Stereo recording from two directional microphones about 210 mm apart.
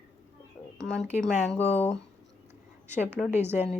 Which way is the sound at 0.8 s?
5° left (ahead or behind).